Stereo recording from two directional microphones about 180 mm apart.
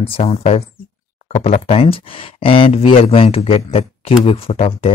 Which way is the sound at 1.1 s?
35° left (ahead or behind).